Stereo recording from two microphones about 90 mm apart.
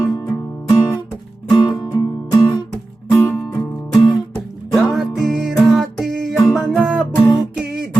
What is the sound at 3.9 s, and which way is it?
Music, 5° left (ahead or behind).